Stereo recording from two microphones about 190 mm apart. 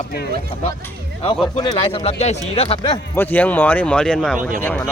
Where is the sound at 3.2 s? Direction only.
10° left (ahead or behind).